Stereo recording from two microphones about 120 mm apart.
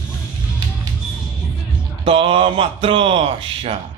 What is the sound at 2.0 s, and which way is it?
Speech, 50° right (ahead or behind).